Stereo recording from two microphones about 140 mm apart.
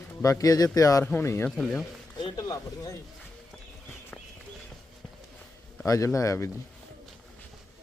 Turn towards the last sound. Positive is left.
turn(degrees=20)  # may be behind; listen again after turning